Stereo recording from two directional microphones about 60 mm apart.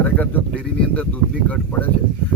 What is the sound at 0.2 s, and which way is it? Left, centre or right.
Speech, left.